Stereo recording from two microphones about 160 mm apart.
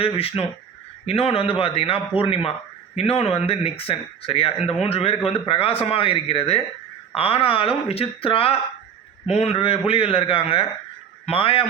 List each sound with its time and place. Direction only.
0.0 s speech: 35° left (ahead or behind)